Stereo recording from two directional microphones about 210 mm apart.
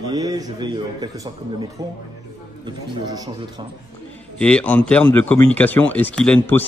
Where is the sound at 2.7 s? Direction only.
20° right (ahead or behind).